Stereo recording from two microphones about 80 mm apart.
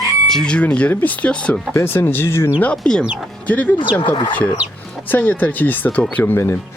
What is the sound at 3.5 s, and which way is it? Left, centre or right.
Speech, centre.